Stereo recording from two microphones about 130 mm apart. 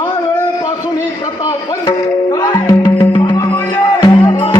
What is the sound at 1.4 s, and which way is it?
Speech, 25° left (ahead or behind).